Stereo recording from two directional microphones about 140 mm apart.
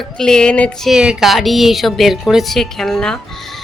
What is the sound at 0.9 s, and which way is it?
A woman's voice, 5° right (ahead or behind).